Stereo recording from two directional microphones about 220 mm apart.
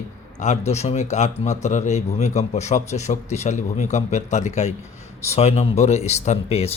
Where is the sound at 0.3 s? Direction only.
30° left (ahead or behind).